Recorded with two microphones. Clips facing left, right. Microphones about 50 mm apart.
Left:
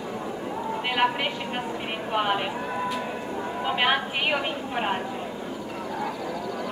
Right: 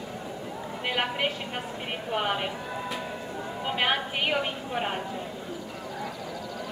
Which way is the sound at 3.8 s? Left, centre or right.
Centre.